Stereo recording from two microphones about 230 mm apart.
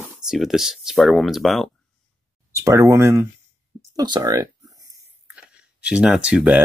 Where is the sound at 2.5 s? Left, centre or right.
Centre.